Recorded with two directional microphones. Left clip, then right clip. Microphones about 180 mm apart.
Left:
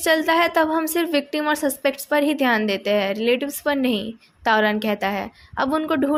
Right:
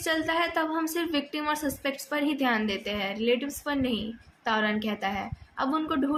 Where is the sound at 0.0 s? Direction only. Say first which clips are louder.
Left 9 dB; 50° left (ahead or behind).